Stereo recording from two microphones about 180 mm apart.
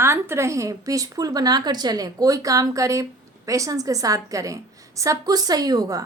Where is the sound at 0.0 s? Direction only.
15° right (ahead or behind).